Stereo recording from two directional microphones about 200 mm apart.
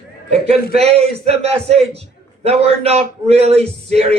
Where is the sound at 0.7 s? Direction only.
30° right (ahead or behind).